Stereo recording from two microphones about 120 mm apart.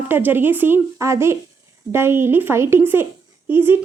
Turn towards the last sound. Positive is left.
turn(degrees=-20)  # may be behind; listen again after turning